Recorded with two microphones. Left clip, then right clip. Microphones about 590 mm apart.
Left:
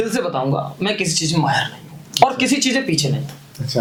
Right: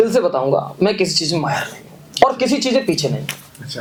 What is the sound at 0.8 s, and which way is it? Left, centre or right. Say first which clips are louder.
Speech: right 4 dB; right.